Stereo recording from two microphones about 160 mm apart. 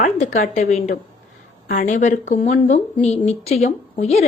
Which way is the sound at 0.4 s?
45° left (ahead or behind).